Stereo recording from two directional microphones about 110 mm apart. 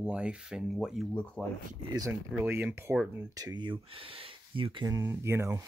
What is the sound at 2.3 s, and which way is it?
Speech, 15° right (ahead or behind).